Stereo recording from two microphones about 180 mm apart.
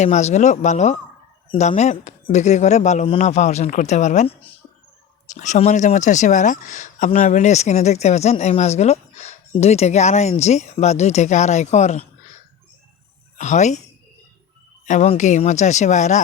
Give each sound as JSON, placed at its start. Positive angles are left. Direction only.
{"t": 0.0, "sound": "speech", "side_deg": 40}
{"t": 13.4, "sound": "speech", "side_deg": 40}
{"t": 14.8, "sound": "speech", "side_deg": 40}